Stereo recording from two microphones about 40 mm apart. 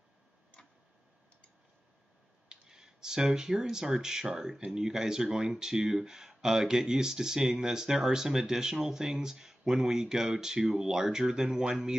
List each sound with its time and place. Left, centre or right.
2.5 s clicking: centre
3.3 s speech: centre